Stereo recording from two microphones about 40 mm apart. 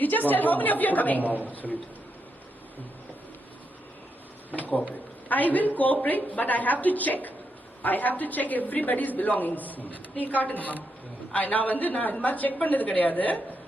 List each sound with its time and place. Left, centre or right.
0.0 s a woman's voice: left
5.3 s a woman's voice: left